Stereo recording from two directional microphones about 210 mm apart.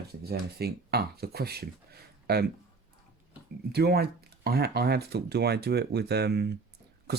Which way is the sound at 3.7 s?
50° right (ahead or behind).